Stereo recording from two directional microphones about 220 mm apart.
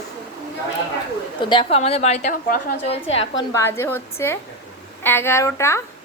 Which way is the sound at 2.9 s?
25° left (ahead or behind).